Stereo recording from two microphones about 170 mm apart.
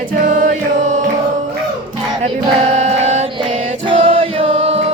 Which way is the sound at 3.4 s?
30° right (ahead or behind).